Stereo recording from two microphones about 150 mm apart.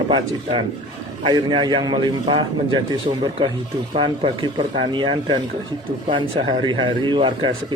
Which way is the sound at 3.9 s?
35° right (ahead or behind).